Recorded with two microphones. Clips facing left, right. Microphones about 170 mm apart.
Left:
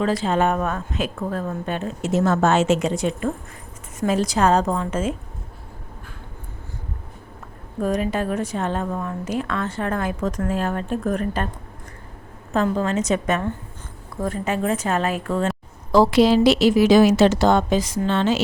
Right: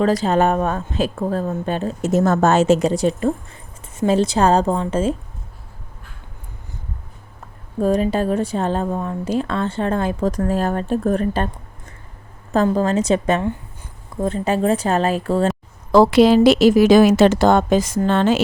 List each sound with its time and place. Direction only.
0.0 s a woman's voice: 40° right (ahead or behind)
7.8 s a woman's voice: 30° right (ahead or behind)
12.5 s a woman's voice: 35° right (ahead or behind)
15.9 s a woman's voice: 60° right (ahead or behind)